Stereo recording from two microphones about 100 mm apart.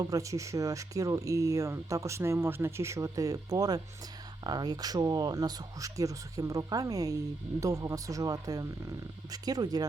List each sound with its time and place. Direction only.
0.0 s speech: 35° right (ahead or behind)